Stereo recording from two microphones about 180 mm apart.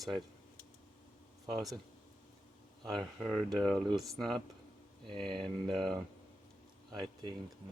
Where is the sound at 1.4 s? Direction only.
20° right (ahead or behind).